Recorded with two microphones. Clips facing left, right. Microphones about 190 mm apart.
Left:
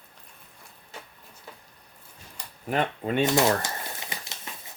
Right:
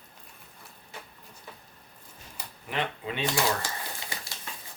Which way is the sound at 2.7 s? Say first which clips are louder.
Left 6 dB; 45° left (ahead or behind).